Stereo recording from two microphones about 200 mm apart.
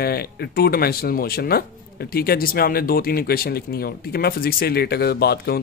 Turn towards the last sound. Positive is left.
turn(degrees=50)  # may be behind; listen again after turning